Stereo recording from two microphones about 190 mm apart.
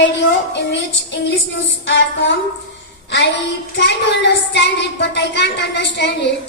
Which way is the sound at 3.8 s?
65° left (ahead or behind).